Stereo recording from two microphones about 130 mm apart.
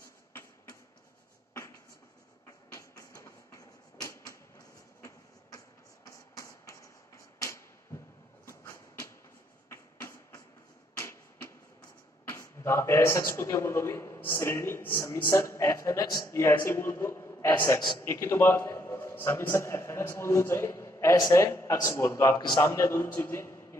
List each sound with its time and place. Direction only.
2.7 s a sound: 20° left (ahead or behind)
8.5 s train: 25° left (ahead or behind)
9.7 s music: 20° left (ahead or behind)
11.0 s a sound: 20° left (ahead or behind)
12.3 s a man's voice: 20° left (ahead or behind)
17.7 s a man's voice: 35° left (ahead or behind)
18.0 s a man's voice: 20° left (ahead or behind)